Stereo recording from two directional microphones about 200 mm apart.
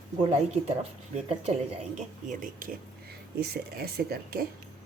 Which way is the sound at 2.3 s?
40° right (ahead or behind).